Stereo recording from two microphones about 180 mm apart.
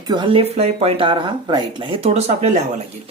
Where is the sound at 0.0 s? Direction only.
25° right (ahead or behind).